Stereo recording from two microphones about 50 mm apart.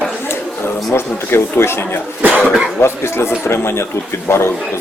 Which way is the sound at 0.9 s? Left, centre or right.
Left.